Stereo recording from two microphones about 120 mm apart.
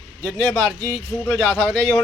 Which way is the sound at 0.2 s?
5° left (ahead or behind).